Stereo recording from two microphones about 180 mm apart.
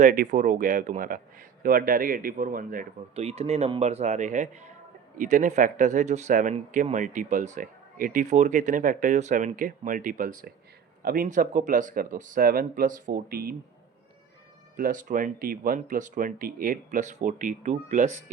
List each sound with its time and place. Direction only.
0.0 s speech: 50° right (ahead or behind)
3.2 s speech: 35° right (ahead or behind); by 13.6 s 55° right (ahead or behind)
14.8 s speech: 45° right (ahead or behind)